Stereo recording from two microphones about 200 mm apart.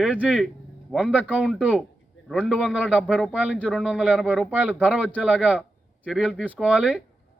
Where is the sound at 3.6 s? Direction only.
5° left (ahead or behind).